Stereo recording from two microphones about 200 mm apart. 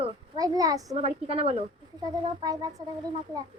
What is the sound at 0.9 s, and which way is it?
A woman's voice, 30° right (ahead or behind).